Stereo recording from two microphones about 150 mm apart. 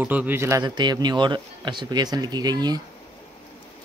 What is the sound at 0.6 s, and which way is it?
Speech, 30° right (ahead or behind).